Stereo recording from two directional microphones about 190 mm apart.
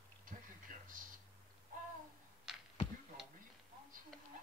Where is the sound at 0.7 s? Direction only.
45° right (ahead or behind).